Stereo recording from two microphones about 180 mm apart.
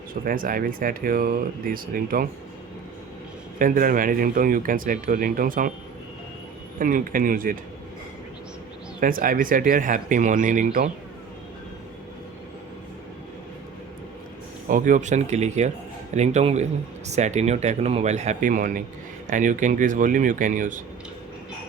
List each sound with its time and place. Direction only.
0.3 s speech: 50° right (ahead or behind)
3.6 s speech: 50° right (ahead or behind)
6.7 s speech: 50° right (ahead or behind)
9.0 s speech: 50° right (ahead or behind)
14.7 s a man's voice: 45° right (ahead or behind)